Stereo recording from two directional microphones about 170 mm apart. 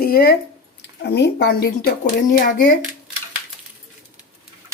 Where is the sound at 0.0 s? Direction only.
60° left (ahead or behind).